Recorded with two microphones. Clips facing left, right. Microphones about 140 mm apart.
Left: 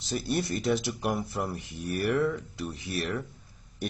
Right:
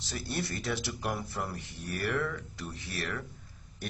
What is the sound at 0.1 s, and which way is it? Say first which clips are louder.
Speech: left 6 dB; 15° left (ahead or behind).